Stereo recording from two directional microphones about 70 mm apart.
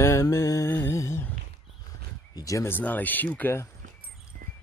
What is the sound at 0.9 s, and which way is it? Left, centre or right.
Humming, left.